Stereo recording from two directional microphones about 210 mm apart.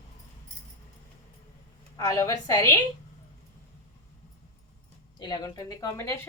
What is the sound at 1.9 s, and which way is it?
Speech, 15° left (ahead or behind).